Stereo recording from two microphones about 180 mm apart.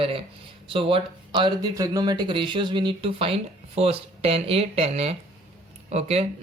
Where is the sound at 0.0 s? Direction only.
30° right (ahead or behind).